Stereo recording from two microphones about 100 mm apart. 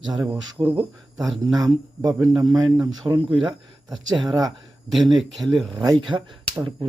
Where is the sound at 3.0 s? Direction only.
50° right (ahead or behind).